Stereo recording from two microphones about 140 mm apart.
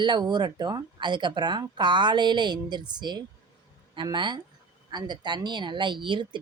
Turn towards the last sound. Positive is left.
turn(degrees=-35)  # may be behind; listen again after turning